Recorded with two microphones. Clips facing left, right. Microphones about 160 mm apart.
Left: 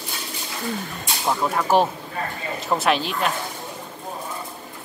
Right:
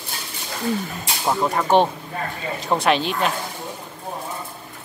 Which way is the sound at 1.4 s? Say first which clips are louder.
Right 2 dB; centre (ahead or behind).